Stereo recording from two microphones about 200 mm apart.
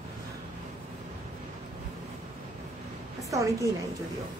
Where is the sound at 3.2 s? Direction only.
15° right (ahead or behind).